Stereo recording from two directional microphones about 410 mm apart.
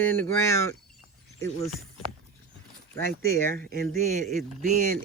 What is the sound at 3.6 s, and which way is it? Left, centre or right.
A man's voice, right.